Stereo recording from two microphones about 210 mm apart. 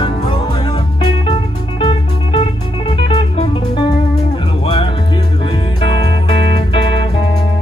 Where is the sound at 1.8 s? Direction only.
20° left (ahead or behind).